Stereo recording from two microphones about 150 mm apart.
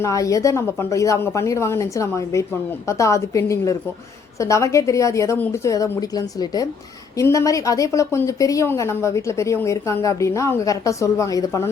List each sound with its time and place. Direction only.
0.0 s speech: 20° left (ahead or behind)